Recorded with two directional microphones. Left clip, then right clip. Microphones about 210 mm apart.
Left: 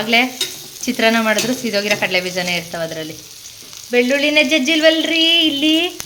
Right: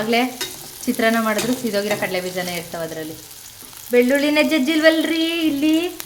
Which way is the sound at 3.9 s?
Centre (ahead or behind).